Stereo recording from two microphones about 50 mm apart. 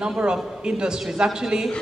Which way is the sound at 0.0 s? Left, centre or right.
Centre.